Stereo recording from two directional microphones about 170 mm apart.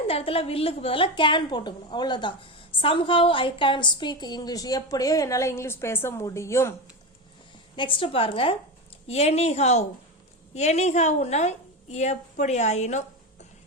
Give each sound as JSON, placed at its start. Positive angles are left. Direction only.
{"t": 0.1, "sound": "a woman's voice", "side_deg": 35}
{"t": 7.8, "sound": "a woman's voice", "side_deg": 30}